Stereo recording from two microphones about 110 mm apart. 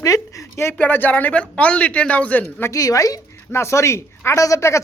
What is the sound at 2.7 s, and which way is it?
Speech, 30° left (ahead or behind).